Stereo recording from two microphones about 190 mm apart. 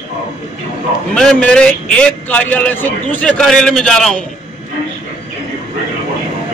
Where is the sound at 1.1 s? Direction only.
5° left (ahead or behind).